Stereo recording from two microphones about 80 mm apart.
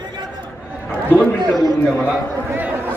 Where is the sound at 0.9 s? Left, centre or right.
Centre.